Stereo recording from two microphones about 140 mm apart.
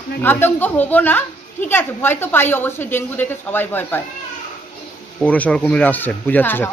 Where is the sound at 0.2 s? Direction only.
15° left (ahead or behind).